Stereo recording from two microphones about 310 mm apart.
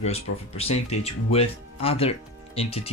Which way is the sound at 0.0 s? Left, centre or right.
Centre.